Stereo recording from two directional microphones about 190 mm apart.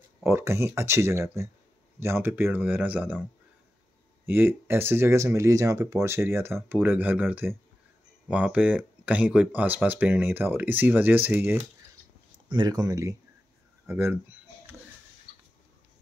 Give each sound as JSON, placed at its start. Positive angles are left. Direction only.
{"t": 0.2, "sound": "speech", "side_deg": -15}
{"t": 4.3, "sound": "speech", "side_deg": -10}
{"t": 12.4, "sound": "speech", "side_deg": -25}